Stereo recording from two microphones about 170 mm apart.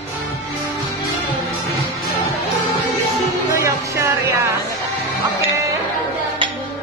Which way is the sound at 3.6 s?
15° right (ahead or behind).